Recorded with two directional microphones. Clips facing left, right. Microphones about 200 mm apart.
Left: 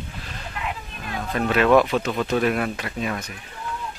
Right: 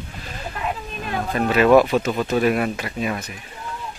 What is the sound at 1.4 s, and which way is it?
Speech, 5° right (ahead or behind).